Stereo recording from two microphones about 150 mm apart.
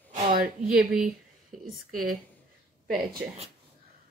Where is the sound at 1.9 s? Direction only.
70° right (ahead or behind).